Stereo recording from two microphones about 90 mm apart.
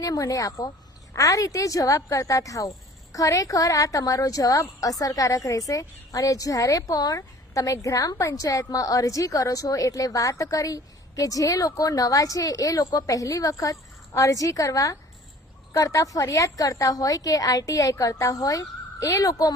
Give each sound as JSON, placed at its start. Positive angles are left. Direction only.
{"t": 0.0, "sound": "a woman's voice", "side_deg": 40}